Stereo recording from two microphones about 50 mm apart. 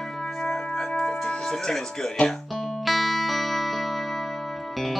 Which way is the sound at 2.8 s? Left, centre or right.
Centre.